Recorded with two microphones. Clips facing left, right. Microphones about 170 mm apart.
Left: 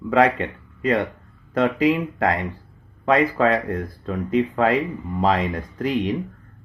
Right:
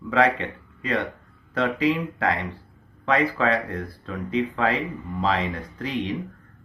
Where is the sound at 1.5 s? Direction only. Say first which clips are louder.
Left 4 dB; 45° left (ahead or behind).